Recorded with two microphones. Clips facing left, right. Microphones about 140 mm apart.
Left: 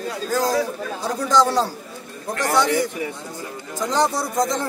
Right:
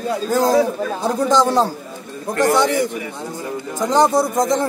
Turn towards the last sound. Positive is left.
turn(degrees=-20)  # may be behind; listen again after turning